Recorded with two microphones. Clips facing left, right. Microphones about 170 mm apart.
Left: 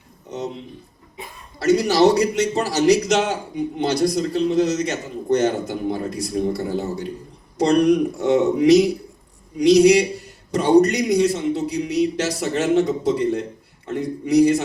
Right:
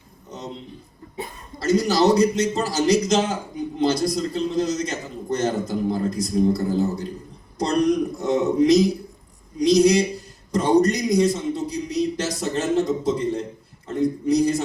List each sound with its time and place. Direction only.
1.5 s a man's voice: 70° left (ahead or behind)